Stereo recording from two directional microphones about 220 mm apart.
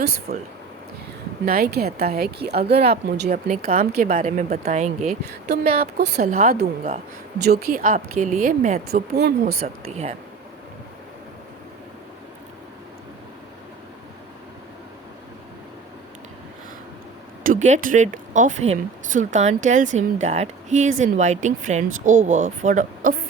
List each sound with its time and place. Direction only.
0.3 s speech: 45° right (ahead or behind)
1.5 s speech: 40° right (ahead or behind)
3.2 s speech: 35° right (ahead or behind)
5.2 s speech: 45° right (ahead or behind)
9.8 s speech: 30° right (ahead or behind)
17.4 s speech: 35° right (ahead or behind)